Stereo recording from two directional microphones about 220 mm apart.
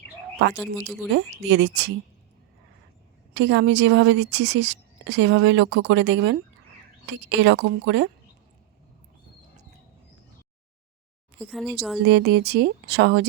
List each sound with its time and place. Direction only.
0.5 s speech: 5° right (ahead or behind)
1.1 s speech: 55° right (ahead or behind)
3.3 s a woman's voice: 55° right (ahead or behind)
11.3 s speech: centre (ahead or behind)
11.9 s speech: 50° right (ahead or behind)